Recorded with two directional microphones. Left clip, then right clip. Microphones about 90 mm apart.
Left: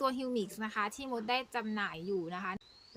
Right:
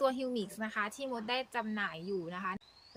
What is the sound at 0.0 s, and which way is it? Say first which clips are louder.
Speech: right 1 dB; 30° left (ahead or behind).